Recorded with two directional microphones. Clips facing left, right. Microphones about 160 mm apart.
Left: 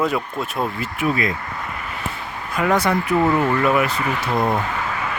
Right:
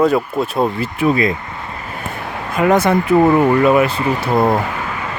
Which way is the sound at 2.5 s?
20° right (ahead or behind).